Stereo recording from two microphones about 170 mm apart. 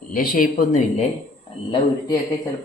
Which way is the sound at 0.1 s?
55° left (ahead or behind).